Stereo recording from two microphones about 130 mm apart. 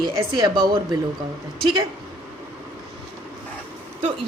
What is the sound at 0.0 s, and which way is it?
Speech, 35° right (ahead or behind).